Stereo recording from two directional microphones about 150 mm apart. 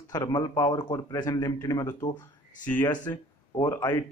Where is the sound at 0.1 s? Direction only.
25° left (ahead or behind).